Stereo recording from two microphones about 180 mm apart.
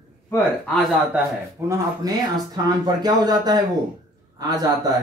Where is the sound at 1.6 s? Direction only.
15° right (ahead or behind).